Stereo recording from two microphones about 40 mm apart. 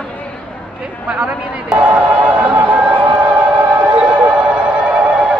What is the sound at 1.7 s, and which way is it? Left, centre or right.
Music, right.